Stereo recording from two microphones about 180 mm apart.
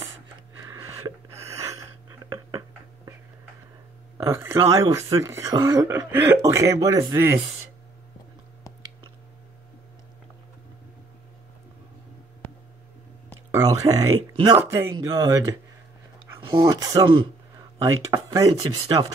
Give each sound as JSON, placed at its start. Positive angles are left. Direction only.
{"t": 0.7, "sound": "a sound", "side_deg": -15}
{"t": 4.2, "sound": "speech", "side_deg": -15}
{"t": 13.5, "sound": "speech", "side_deg": -20}